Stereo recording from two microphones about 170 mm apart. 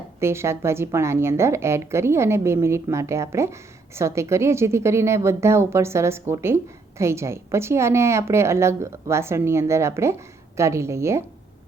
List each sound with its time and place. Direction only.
0.2 s a woman's voice: 15° right (ahead or behind)